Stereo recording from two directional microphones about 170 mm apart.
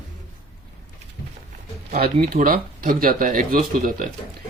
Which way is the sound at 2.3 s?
55° right (ahead or behind).